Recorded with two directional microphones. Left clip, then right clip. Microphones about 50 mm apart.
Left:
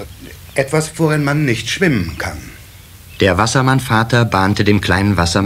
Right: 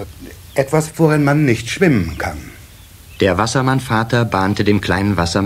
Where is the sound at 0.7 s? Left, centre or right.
Right.